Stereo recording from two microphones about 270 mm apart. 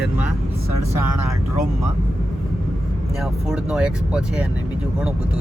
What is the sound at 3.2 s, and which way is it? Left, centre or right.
Speech, centre.